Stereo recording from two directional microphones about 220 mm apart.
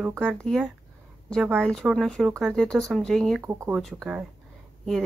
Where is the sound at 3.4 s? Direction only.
15° right (ahead or behind).